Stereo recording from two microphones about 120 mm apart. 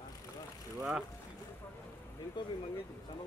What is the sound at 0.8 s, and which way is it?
Speech, 10° right (ahead or behind).